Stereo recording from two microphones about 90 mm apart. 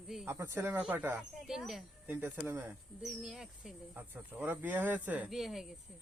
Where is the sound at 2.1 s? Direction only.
25° right (ahead or behind).